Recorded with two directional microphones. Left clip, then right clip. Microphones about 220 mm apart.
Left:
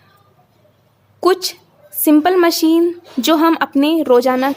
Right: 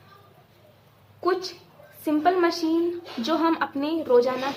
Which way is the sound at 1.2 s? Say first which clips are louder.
Left 10 dB; 45° left (ahead or behind).